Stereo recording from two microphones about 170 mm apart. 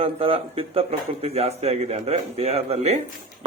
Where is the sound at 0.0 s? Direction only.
35° right (ahead or behind).